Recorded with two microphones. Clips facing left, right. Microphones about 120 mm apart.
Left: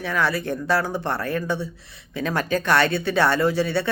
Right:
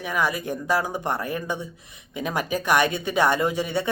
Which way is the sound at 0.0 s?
15° right (ahead or behind).